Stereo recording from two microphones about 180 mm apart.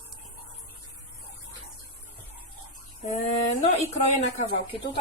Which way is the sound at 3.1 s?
45° left (ahead or behind).